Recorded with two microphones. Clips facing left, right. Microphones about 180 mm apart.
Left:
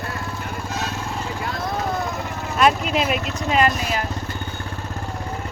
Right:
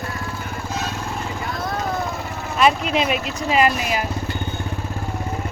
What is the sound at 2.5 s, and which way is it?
Speech, centre (ahead or behind).